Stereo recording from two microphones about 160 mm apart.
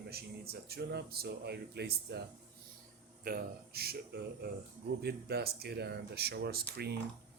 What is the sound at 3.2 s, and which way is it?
Speech, 75° right (ahead or behind).